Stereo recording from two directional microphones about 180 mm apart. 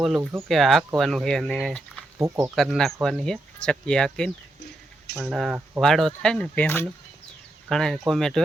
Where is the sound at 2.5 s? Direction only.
Centre (ahead or behind).